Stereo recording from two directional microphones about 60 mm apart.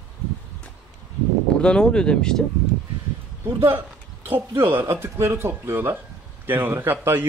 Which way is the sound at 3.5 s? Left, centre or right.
Right.